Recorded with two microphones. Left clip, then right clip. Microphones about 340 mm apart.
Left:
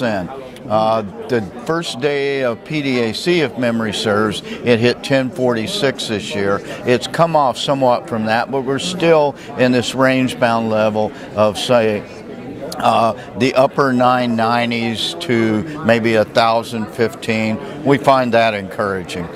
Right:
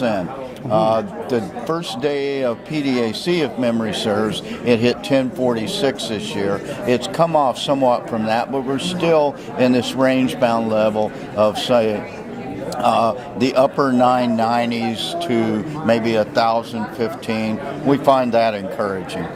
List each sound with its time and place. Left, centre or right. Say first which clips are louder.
0.7 s a man's voice: left 1 dB; left